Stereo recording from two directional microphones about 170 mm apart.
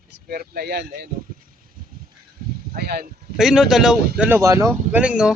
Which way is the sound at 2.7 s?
70° right (ahead or behind).